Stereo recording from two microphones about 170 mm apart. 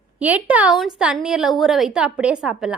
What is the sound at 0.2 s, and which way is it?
A woman's voice, 10° right (ahead or behind).